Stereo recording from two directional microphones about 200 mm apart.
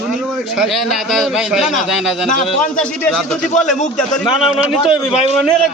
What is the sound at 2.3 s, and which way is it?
Speech, 40° left (ahead or behind).